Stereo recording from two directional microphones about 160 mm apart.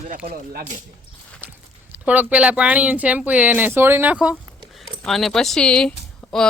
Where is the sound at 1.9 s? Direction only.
10° right (ahead or behind).